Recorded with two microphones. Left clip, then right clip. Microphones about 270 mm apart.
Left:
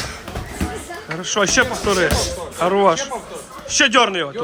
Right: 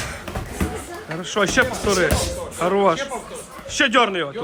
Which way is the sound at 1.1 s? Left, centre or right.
Centre.